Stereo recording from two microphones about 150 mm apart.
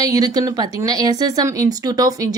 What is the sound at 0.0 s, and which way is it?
Speech, 25° right (ahead or behind).